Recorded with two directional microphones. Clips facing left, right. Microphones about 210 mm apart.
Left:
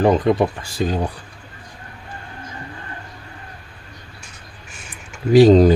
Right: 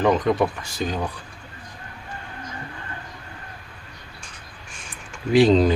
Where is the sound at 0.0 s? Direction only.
30° left (ahead or behind).